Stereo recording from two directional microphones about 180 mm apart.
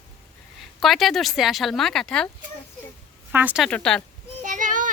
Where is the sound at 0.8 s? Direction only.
Centre (ahead or behind).